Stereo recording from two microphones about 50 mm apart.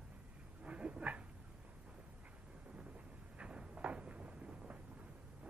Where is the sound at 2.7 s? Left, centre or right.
Right.